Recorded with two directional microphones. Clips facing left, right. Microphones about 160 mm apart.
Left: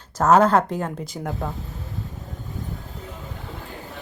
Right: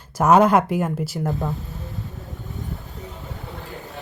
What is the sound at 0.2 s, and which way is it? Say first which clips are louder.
Speech: right 1 dB; 10° right (ahead or behind).